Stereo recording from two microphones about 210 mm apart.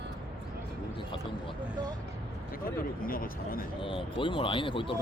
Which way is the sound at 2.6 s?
45° left (ahead or behind).